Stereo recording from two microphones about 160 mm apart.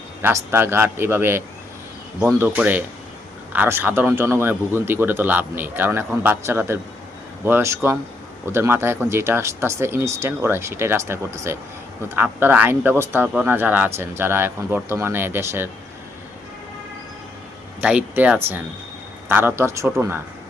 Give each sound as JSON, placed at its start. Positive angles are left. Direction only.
{"t": 0.2, "sound": "speech", "side_deg": -15}
{"t": 17.7, "sound": "speech", "side_deg": -10}